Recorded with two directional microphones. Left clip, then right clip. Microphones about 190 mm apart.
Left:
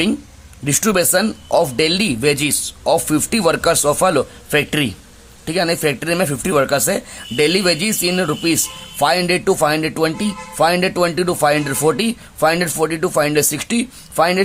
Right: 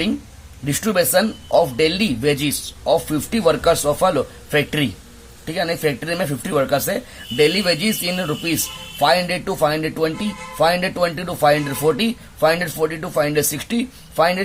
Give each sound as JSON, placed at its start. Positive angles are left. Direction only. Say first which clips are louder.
{"t": 0.6, "sound": "speech", "louder": "left 2 dB", "side_deg": 35}